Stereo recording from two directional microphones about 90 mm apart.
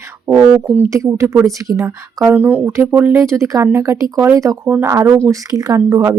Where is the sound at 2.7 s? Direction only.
30° right (ahead or behind).